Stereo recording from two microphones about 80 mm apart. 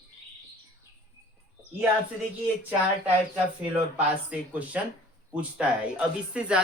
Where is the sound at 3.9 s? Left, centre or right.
Centre.